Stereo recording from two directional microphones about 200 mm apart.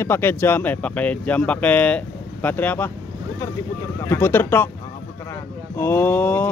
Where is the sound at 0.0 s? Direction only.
10° left (ahead or behind).